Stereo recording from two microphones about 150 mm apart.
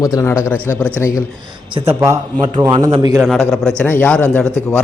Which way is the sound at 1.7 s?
45° right (ahead or behind).